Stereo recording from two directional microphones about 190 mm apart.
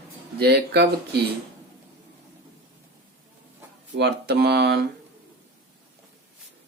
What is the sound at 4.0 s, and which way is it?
Speech, 60° right (ahead or behind).